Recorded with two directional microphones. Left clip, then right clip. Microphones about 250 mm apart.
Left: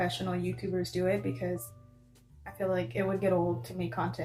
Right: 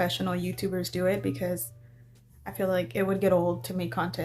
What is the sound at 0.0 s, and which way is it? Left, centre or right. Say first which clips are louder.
Speech: right 4 dB; right.